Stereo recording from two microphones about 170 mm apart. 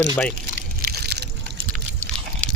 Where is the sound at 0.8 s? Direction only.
70° right (ahead or behind).